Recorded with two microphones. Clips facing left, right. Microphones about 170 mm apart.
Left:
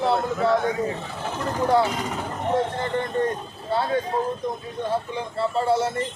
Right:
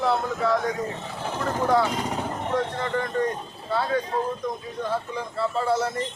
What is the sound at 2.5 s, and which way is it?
Speech, 25° left (ahead or behind).